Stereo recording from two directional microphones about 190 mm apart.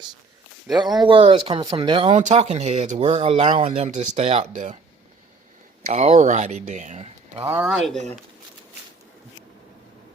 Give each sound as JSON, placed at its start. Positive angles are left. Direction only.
{"t": 1.0, "sound": "speech", "side_deg": -25}
{"t": 5.9, "sound": "speech", "side_deg": -40}
{"t": 7.4, "sound": "speech", "side_deg": -15}
{"t": 7.9, "sound": "speech", "side_deg": 0}